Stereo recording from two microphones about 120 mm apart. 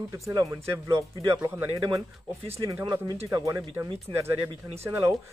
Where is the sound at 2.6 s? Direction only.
30° right (ahead or behind).